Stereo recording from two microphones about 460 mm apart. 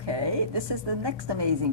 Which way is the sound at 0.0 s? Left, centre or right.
Right.